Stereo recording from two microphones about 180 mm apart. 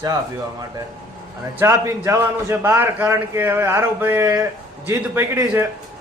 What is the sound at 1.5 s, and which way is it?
A man's voice, 15° right (ahead or behind).